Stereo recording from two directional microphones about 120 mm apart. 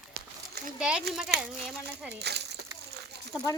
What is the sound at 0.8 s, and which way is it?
Speech, 5° right (ahead or behind).